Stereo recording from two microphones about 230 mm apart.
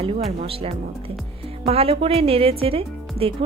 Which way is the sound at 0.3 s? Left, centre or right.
Right.